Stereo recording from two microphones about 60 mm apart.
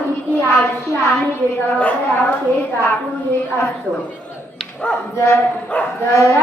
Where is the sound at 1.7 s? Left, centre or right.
Left.